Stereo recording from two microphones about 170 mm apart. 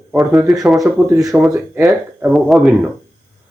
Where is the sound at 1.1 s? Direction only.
20° right (ahead or behind).